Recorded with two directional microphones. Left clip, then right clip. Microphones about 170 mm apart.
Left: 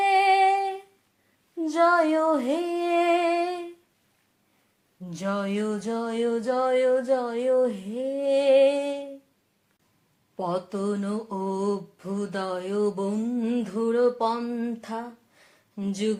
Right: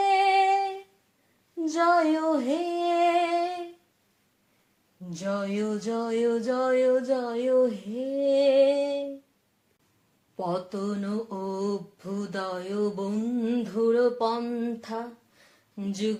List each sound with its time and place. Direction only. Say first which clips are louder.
0.0 s female singing: left 2 dB; 35° left (ahead or behind)
5.0 s mantra: left 1 dB; 40° left (ahead or behind)
10.3 s mantra: left 2 dB; 35° left (ahead or behind)
15.7 s speech: left 2 dB; 35° left (ahead or behind)